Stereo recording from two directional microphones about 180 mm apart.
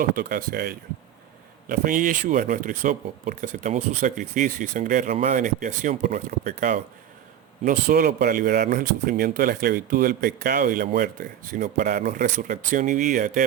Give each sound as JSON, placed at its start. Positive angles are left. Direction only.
{"t": 0.0, "sound": "speech", "side_deg": -50}